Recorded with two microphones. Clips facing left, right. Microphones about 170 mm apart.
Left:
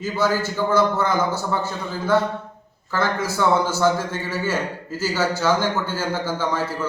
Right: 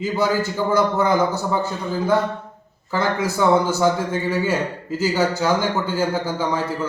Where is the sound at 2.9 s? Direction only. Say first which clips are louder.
Right 2 dB; 15° right (ahead or behind).